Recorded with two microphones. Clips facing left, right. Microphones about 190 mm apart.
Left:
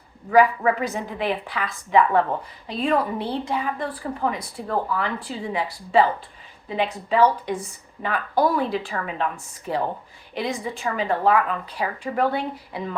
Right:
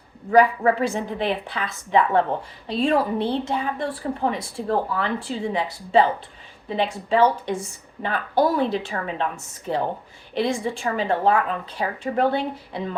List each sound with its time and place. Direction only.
0.3 s a woman's voice: 30° right (ahead or behind)